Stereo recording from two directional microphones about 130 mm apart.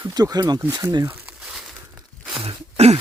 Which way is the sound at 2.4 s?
50° right (ahead or behind).